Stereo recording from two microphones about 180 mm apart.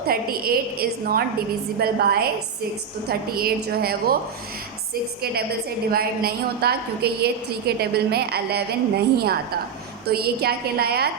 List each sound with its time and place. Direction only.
0.1 s a woman's voice: 55° right (ahead or behind)
5.9 s a woman's voice: 55° right (ahead or behind)